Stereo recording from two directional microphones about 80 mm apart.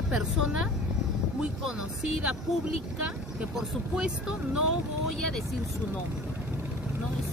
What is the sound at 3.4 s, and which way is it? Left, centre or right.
Speech, centre.